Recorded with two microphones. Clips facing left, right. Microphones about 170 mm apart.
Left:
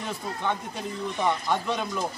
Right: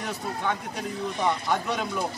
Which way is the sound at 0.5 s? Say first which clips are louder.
Left 1 dB; centre (ahead or behind).